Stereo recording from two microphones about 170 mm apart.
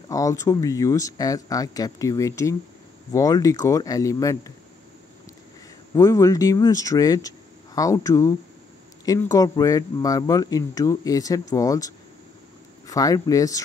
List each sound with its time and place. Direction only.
0.1 s speech: 20° left (ahead or behind)
5.9 s speech: 20° left (ahead or behind)